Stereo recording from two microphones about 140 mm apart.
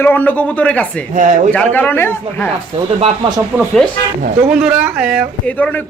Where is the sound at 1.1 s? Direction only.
70° right (ahead or behind).